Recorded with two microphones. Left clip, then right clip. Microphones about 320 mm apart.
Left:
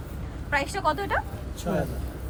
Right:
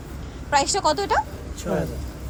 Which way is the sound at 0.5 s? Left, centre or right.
Centre.